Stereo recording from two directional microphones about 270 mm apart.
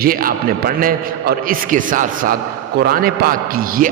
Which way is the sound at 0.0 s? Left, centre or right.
Right.